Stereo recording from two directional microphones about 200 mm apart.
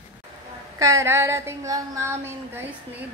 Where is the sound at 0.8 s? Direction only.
15° right (ahead or behind).